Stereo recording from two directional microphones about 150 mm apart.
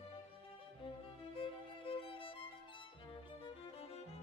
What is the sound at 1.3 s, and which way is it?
Music, 35° left (ahead or behind).